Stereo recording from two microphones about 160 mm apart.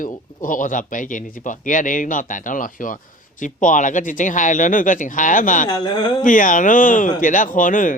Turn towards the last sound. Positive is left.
turn(degrees=55)  # may be behind; listen again after turning